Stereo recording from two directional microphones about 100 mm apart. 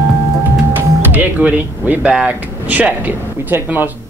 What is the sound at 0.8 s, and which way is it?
Music, 20° right (ahead or behind).